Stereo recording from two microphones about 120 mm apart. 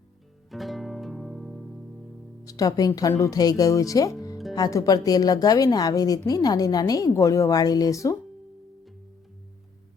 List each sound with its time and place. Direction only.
0.5 s music: centre (ahead or behind)
2.5 s a woman's voice: 30° left (ahead or behind)